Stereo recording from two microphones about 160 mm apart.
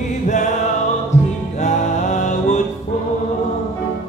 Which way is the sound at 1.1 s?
45° left (ahead or behind).